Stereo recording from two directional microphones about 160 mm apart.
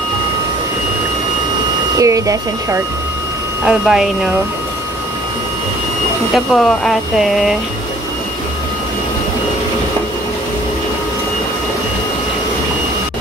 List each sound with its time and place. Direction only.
2.0 s speech: 20° right (ahead or behind)
3.6 s speech: 5° right (ahead or behind)
6.3 s speech: centre (ahead or behind)